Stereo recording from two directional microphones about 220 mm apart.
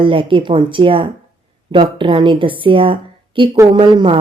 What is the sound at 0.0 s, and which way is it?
Speech, 25° right (ahead or behind).